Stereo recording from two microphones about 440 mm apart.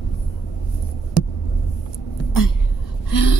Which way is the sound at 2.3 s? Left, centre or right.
Left.